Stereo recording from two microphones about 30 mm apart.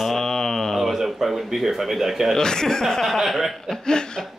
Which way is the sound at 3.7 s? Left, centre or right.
Left.